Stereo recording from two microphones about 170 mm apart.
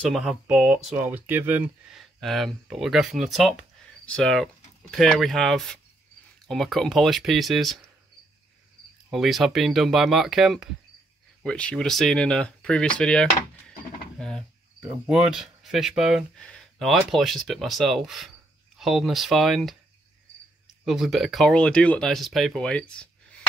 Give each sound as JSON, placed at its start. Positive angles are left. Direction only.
{"t": 0.1, "sound": "speech", "side_deg": 0}
{"t": 9.1, "sound": "speech", "side_deg": 0}
{"t": 20.8, "sound": "speech", "side_deg": 0}